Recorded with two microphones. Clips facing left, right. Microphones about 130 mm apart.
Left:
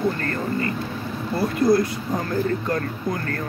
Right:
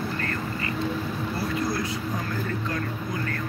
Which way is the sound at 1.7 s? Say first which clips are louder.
Left 9 dB; 45° left (ahead or behind).